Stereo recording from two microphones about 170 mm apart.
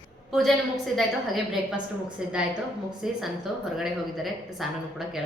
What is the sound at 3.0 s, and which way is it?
Speech, 5° right (ahead or behind).